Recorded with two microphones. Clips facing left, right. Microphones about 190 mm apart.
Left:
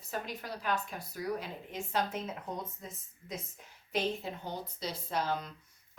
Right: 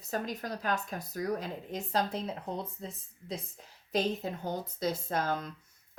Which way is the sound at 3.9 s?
45° right (ahead or behind).